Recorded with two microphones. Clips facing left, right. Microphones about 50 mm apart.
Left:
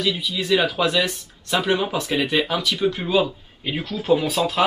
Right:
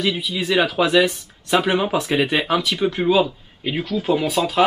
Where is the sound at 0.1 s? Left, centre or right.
Centre.